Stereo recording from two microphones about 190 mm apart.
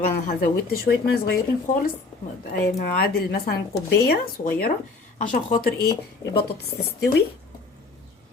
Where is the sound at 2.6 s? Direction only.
50° left (ahead or behind).